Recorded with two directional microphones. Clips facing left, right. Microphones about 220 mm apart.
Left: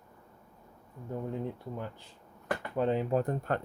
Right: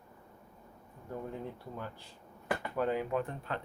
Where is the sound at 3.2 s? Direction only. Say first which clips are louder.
Left 7 dB; 45° left (ahead or behind).